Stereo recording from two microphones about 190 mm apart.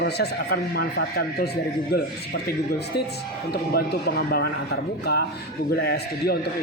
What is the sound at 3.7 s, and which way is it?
Speech, 55° left (ahead or behind).